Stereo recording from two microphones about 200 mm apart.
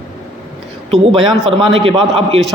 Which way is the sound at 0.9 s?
30° right (ahead or behind).